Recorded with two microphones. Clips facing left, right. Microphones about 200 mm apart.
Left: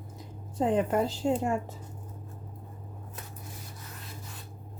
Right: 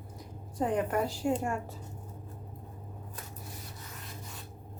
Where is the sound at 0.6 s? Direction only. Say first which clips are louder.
Left 3 dB; 25° left (ahead or behind).